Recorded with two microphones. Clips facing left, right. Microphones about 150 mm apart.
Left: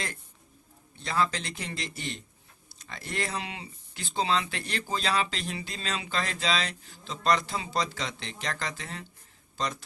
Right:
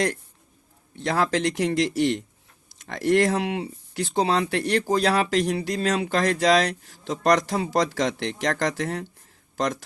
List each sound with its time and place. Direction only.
0.9 s a man's voice: 80° right
3.3 s speech: 60° right (ahead or behind)
4.2 s speech: 45° right (ahead or behind)
4.4 s speech: 70° right (ahead or behind)